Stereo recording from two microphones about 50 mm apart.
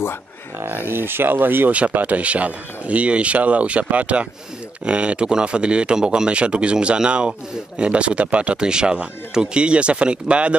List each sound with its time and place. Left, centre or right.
0.7 s speech: right
1.7 s a man's voice: right